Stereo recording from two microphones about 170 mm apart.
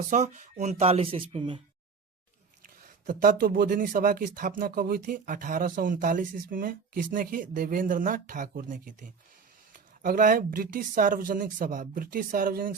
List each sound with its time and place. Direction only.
0.1 s speech: 45° right (ahead or behind)
2.8 s speech: 55° right (ahead or behind)